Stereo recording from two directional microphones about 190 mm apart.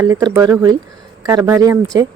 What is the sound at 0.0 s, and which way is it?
Speech, 20° right (ahead or behind).